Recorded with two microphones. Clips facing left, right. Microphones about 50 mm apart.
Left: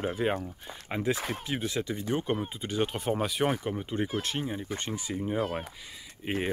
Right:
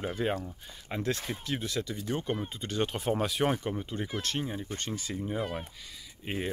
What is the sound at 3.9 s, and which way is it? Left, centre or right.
Speech, centre.